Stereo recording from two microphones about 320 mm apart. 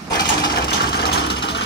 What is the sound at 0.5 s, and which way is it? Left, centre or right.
Vehicle, left.